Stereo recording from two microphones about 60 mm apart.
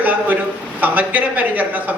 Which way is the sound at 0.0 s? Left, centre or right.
Right.